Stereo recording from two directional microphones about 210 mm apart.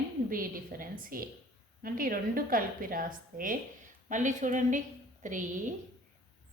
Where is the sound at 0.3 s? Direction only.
40° right (ahead or behind).